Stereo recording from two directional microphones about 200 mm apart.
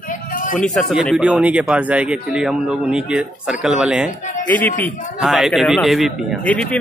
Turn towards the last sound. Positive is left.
turn(degrees=5)  # may be behind; listen again after turning